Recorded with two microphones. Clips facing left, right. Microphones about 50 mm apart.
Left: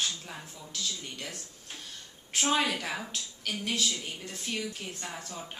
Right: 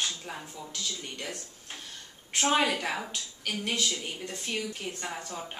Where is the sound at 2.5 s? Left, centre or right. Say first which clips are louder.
Right 3 dB; centre.